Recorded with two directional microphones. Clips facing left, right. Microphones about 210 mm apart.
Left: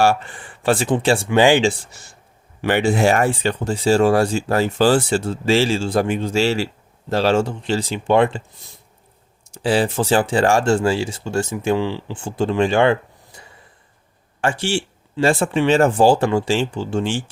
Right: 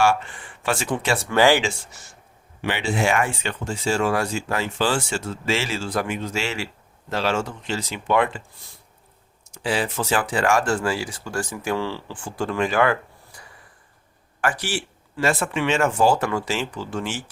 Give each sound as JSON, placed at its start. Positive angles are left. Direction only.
{"t": 0.0, "sound": "speech", "side_deg": 35}
{"t": 1.3, "sound": "speech", "side_deg": 20}
{"t": 1.6, "sound": "speech", "side_deg": 30}
{"t": 2.6, "sound": "speech", "side_deg": 45}
{"t": 9.5, "sound": "speech", "side_deg": 30}